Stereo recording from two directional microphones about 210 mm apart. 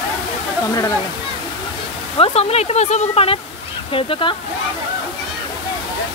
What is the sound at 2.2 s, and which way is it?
Speech, 30° left (ahead or behind).